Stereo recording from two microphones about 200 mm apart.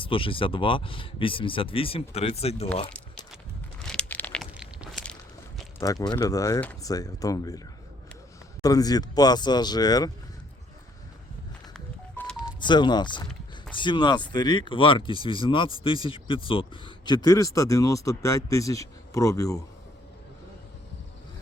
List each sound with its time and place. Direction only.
0.0 s speech: 25° left (ahead or behind)
3.8 s a sound: 5° left (ahead or behind)
4.5 s a sound: 5° right (ahead or behind)
5.8 s speech: 15° left (ahead or behind)
8.6 s speech: 20° left (ahead or behind)
12.5 s speech: 25° left (ahead or behind)